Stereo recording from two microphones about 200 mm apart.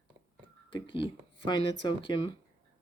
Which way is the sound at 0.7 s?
25° left (ahead or behind).